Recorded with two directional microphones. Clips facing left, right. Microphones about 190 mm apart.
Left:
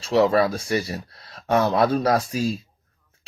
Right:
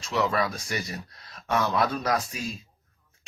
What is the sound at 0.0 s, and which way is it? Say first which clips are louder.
Speech: left 8 dB; 30° left (ahead or behind).